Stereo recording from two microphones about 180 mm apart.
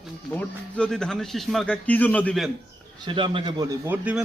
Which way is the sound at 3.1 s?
30° right (ahead or behind).